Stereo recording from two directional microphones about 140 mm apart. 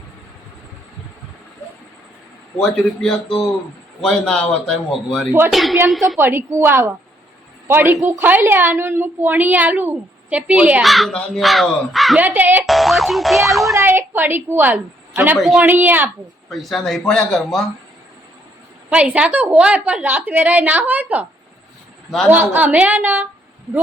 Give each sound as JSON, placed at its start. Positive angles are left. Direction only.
{"t": 2.6, "sound": "speech", "side_deg": 5}
{"t": 6.1, "sound": "a woman's voice", "side_deg": -15}
{"t": 10.8, "sound": "speech", "side_deg": 0}
{"t": 12.2, "sound": "a woman's voice", "side_deg": -15}
{"t": 12.6, "sound": "speech", "side_deg": 0}
{"t": 13.7, "sound": "a woman's voice", "side_deg": -20}
{"t": 15.4, "sound": "speech", "side_deg": 0}
{"t": 15.6, "sound": "a woman's voice", "side_deg": -15}
{"t": 16.5, "sound": "speech", "side_deg": 0}
{"t": 18.9, "sound": "a woman's voice", "side_deg": -10}
{"t": 22.3, "sound": "a woman's voice", "side_deg": -15}